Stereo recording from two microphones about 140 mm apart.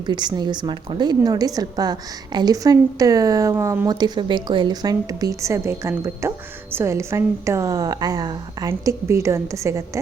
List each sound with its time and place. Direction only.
0.0 s a woman's voice: 30° right (ahead or behind)